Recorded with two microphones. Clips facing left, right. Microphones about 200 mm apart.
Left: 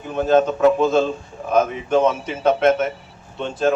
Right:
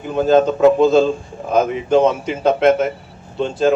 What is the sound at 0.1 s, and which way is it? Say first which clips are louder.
Speech: right 3 dB; 35° right (ahead or behind).